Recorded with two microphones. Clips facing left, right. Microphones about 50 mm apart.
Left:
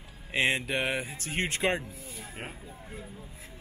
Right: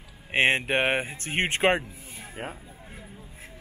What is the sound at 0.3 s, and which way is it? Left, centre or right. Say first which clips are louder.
Speech: right 5 dB; right.